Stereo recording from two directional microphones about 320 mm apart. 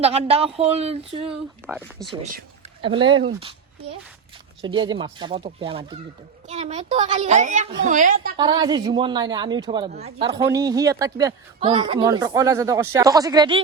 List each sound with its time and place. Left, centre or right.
0.0 s a woman's voice: centre
1.3 s speech: centre
2.8 s a woman's voice: centre
4.6 s a woman's voice: centre
8.4 s a woman's voice: centre